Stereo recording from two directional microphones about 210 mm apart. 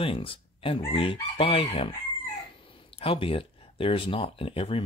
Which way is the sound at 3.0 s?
25° left (ahead or behind).